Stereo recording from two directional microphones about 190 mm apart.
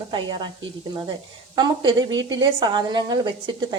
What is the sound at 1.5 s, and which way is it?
A woman's voice, 25° right (ahead or behind).